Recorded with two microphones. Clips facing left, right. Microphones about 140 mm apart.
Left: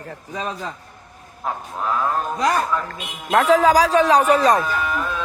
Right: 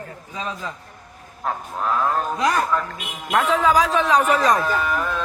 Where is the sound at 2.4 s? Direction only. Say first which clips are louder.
Left 2 dB; 35° left (ahead or behind).